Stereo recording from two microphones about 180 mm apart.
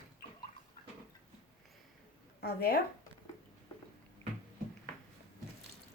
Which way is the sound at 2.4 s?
60° left (ahead or behind).